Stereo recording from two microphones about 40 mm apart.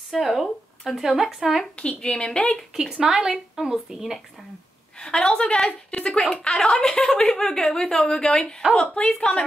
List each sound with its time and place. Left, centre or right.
0.1 s speech: centre
1.8 s a woman's voice: left
3.0 s a woman's voice: centre
4.9 s a woman's voice: centre